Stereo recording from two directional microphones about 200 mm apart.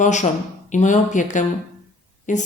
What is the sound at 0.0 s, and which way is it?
A woman's voice, 35° left (ahead or behind).